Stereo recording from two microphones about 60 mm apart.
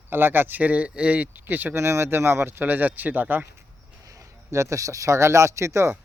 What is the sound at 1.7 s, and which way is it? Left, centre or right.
Speech, right.